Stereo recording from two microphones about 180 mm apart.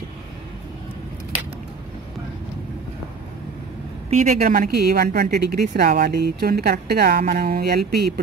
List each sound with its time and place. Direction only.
4.1 s a woman's voice: 45° right (ahead or behind)